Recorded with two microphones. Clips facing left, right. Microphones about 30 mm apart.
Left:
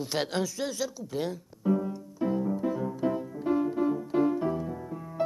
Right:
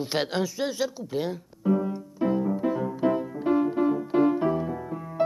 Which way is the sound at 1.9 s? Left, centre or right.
Right.